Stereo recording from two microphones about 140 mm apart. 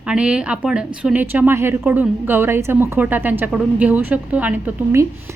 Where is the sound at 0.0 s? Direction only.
5° right (ahead or behind).